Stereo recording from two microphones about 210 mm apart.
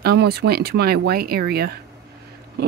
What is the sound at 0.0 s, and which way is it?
Speech, 50° right (ahead or behind).